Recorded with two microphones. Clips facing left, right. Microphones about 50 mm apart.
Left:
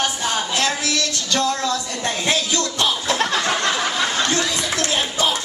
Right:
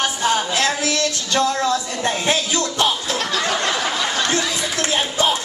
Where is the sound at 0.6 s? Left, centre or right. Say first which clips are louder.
Right 2 dB; right.